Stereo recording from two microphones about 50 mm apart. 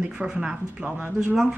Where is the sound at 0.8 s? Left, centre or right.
Right.